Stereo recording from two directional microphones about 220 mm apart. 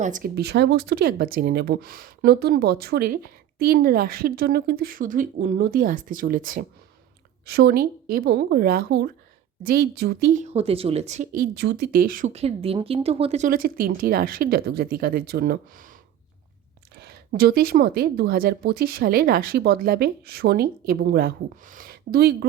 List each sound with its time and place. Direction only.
0.0 s speech: 40° right (ahead or behind)
10.4 s speech: 30° right (ahead or behind); by 15.9 s 45° right (ahead or behind)
16.9 s speech: 45° right (ahead or behind)